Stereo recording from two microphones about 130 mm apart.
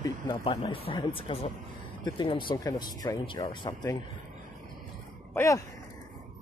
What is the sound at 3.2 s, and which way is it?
Speech, 40° left (ahead or behind).